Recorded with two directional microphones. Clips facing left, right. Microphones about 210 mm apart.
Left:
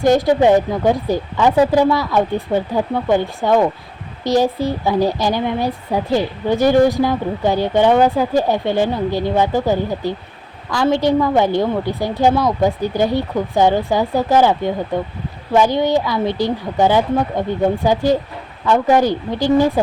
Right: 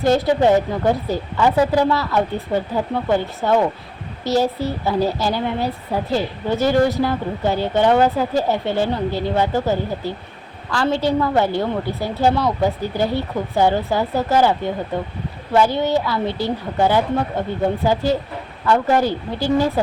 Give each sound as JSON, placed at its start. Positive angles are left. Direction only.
{"t": 0.0, "sound": "a woman's voice", "side_deg": 15}